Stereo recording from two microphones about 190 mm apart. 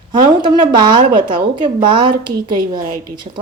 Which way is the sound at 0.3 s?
25° right (ahead or behind).